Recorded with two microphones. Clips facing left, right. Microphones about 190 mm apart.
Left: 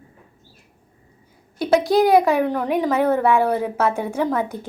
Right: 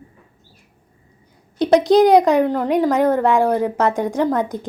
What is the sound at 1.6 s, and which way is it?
A woman's voice, 20° right (ahead or behind).